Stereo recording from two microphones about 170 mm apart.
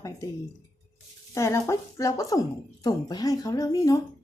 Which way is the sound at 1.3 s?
15° left (ahead or behind).